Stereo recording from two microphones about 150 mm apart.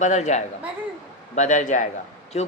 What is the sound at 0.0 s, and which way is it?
A man's voice, 50° left (ahead or behind).